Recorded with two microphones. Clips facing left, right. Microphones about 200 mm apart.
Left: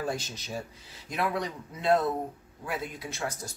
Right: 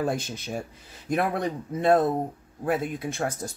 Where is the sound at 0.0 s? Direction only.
55° right (ahead or behind).